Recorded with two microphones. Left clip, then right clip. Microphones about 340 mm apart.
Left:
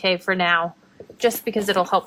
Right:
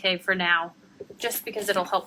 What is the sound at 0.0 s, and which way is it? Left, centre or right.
A woman's voice, centre.